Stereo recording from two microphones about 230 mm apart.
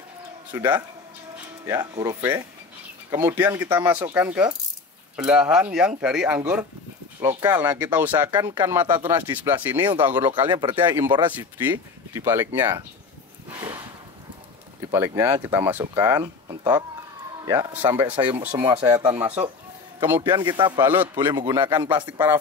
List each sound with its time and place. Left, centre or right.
0.5 s speech: centre
10.2 s speech: centre
10.9 s speech: centre
14.9 s speech: centre
17.5 s speech: centre
18.1 s speech: right
18.9 s speech: centre
20.2 s speech: centre
20.8 s speech: centre